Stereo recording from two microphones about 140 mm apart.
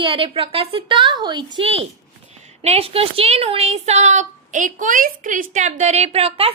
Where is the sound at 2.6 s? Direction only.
45° right (ahead or behind).